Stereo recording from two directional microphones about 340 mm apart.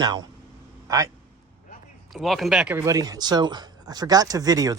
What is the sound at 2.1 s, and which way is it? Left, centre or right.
Speech, centre.